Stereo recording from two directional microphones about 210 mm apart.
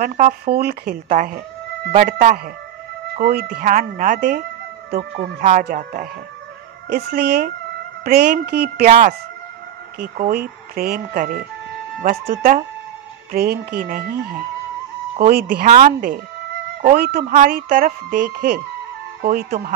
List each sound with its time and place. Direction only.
0.0 s speech: 40° right (ahead or behind)
9.9 s speech: 45° right (ahead or behind)
15.1 s speech: 45° right (ahead or behind)